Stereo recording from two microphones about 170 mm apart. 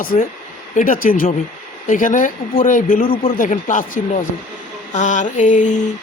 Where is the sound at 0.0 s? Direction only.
55° left (ahead or behind).